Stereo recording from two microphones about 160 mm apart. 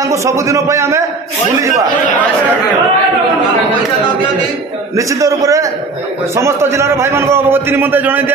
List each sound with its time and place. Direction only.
0.1 s a man's voice: 20° right (ahead or behind)
4.9 s a man's voice: 20° right (ahead or behind)